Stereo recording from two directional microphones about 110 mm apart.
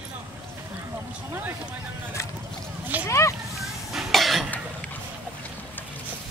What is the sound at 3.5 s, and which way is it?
Cough, centre (ahead or behind).